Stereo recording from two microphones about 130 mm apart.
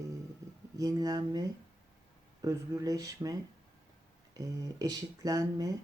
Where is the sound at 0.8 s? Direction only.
30° right (ahead or behind).